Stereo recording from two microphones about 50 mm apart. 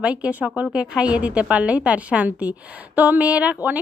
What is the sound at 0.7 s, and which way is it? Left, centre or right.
Speech, centre.